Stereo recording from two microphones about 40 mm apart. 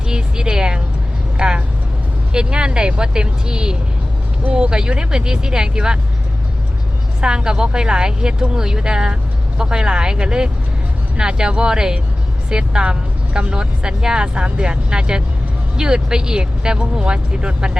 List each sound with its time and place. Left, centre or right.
0.1 s a sound: centre
1.4 s speech: right
7.2 s a woman's voice: right